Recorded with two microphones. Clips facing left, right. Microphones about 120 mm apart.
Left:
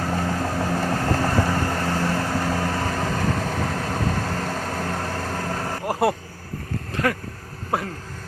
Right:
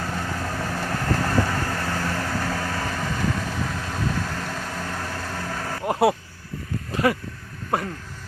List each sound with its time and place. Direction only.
0.1 s vehicle: 30° left (ahead or behind)
5.8 s speech: centre (ahead or behind)
7.7 s a sound: centre (ahead or behind)